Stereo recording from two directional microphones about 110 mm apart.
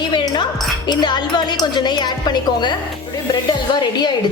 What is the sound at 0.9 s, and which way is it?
A woman's voice, 40° left (ahead or behind).